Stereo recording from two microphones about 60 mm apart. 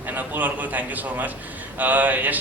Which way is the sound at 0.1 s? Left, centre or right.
Right.